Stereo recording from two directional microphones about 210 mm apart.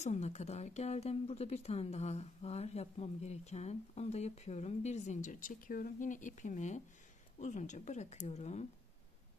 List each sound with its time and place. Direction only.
0.0 s a woman's voice: 30° left (ahead or behind)